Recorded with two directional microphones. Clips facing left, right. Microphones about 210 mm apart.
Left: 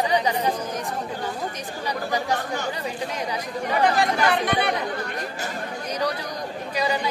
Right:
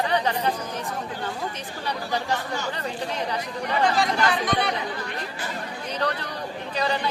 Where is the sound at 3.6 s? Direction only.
55° left (ahead or behind).